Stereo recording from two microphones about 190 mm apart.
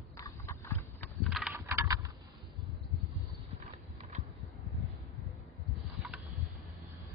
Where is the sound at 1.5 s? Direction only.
15° right (ahead or behind).